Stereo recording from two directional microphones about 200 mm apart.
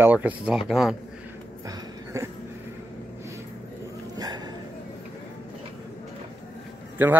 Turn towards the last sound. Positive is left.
turn(degrees=-10)  # may be behind; listen again after turning